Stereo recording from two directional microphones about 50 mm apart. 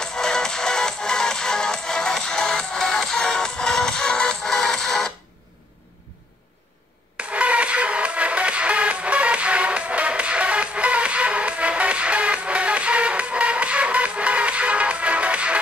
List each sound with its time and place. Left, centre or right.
0.0 s music: centre
7.2 s music: right